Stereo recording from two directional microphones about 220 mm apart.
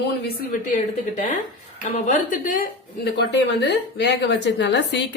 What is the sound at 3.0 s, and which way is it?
A woman's voice, 50° left (ahead or behind).